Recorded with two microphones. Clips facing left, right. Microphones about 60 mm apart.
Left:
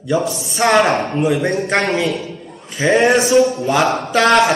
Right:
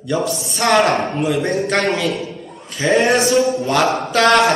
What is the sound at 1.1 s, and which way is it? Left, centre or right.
A man's voice, centre.